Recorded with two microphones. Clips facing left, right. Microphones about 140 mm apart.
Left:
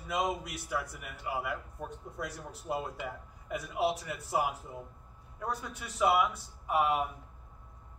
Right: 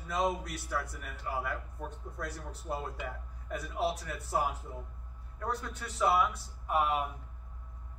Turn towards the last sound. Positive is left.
turn(degrees=0)  # may be behind; listen again after turning